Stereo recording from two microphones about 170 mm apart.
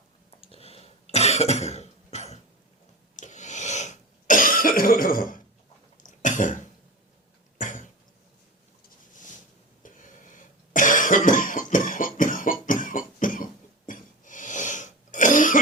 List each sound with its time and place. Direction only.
0.4 s cough: 35° left (ahead or behind)
9.8 s cough: 50° left (ahead or behind)